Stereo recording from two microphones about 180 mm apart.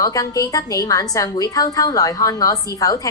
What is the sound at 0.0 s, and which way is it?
A woman's voice, 20° left (ahead or behind).